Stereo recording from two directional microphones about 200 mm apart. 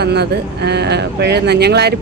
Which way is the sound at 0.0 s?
55° right (ahead or behind).